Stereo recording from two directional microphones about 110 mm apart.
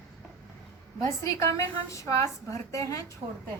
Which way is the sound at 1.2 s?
25° left (ahead or behind).